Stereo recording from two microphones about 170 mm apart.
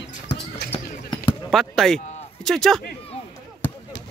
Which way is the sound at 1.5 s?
Centre (ahead or behind).